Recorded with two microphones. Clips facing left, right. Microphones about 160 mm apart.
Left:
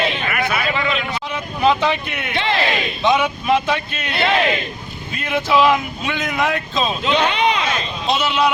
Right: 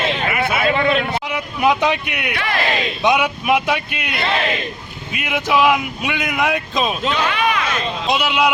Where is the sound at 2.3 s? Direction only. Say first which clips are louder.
Left 4 dB; 25° left (ahead or behind).